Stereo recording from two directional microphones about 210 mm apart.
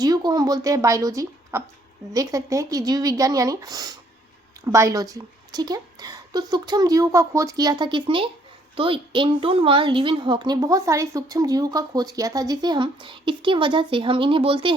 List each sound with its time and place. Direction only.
0.0 s a woman's voice: 20° right (ahead or behind)